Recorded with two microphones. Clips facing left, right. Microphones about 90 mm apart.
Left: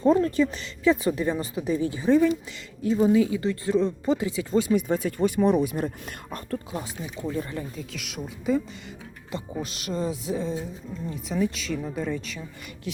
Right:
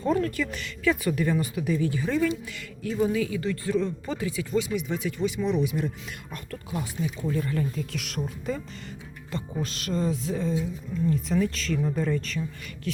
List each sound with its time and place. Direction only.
0.0 s speech: 25° left (ahead or behind)
4.5 s speech: 40° left (ahead or behind)
6.5 s speech: 30° left (ahead or behind)
7.8 s speech: 5° left (ahead or behind)